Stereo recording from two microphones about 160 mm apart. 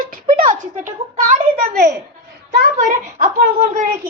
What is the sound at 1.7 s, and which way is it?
Speech, 75° right (ahead or behind).